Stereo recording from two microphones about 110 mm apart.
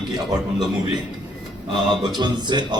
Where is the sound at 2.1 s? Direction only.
45° right (ahead or behind).